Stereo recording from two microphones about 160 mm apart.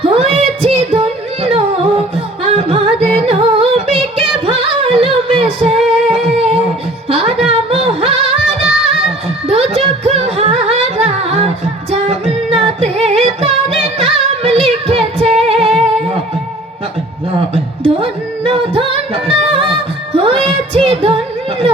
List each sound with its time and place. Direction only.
0.0 s a sound: 40° right (ahead or behind)
0.3 s singing: 40° right (ahead or behind)
7.1 s music: 40° right (ahead or behind)
9.5 s music: 40° right (ahead or behind)
14.0 s singing: 40° right (ahead or behind)
17.5 s music: 40° right (ahead or behind)